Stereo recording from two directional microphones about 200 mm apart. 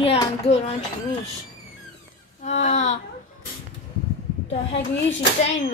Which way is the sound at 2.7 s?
35° left (ahead or behind).